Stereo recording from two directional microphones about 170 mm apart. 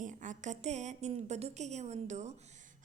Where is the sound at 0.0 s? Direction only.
50° right (ahead or behind).